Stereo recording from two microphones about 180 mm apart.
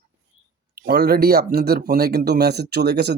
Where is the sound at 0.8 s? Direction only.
60° right (ahead or behind).